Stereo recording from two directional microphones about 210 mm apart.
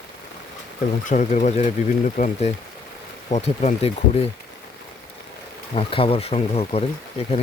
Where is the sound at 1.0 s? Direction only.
35° left (ahead or behind).